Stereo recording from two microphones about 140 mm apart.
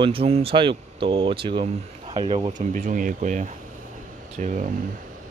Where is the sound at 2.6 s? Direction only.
70° right (ahead or behind).